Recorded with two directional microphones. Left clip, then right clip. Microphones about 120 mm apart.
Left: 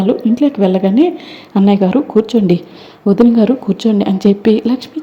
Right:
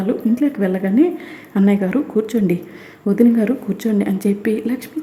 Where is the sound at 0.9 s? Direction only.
35° right (ahead or behind).